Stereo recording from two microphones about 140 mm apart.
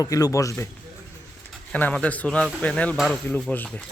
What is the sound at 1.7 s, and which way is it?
A man's voice, 10° left (ahead or behind).